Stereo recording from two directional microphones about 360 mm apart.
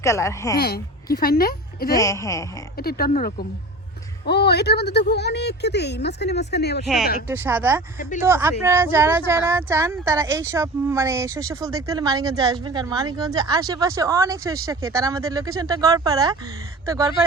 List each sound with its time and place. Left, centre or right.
0.0 s speech: centre
0.6 s speech: left
2.0 s speech: centre
2.7 s a woman's voice: left
6.8 s speech: centre